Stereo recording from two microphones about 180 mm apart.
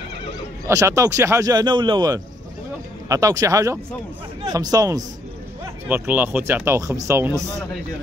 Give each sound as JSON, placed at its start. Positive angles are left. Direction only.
{"t": 0.7, "sound": "speech", "side_deg": -15}